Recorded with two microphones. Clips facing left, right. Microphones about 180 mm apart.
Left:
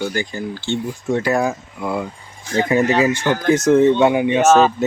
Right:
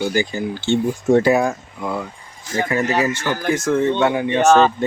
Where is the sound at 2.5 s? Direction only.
20° left (ahead or behind).